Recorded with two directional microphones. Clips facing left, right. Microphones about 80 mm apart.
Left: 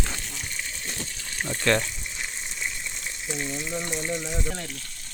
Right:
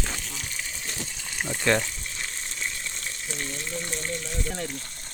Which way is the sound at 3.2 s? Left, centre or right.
Centre.